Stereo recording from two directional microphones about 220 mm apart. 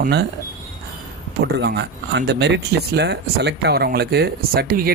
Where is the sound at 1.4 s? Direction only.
50° right (ahead or behind).